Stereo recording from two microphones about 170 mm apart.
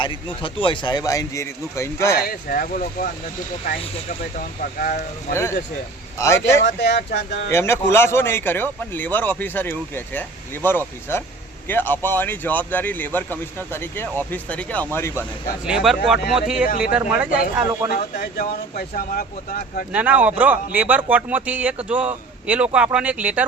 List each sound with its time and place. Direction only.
0.0 s speech: 30° left (ahead or behind)
2.2 s speech: 60° left (ahead or behind)
4.4 s speech: 55° left (ahead or behind)
5.3 s speech: 15° left (ahead or behind)
6.7 s speech: 80° left
7.5 s speech: 15° left (ahead or behind)
15.6 s speech: 5° right (ahead or behind)
16.6 s speech: 60° left (ahead or behind)
16.9 s a man's voice: 10° right (ahead or behind)
18.1 s speech: 60° left (ahead or behind)
19.9 s a man's voice: 10° right (ahead or behind)